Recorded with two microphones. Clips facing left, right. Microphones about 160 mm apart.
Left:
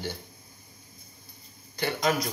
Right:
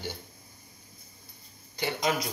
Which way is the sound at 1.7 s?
15° right (ahead or behind).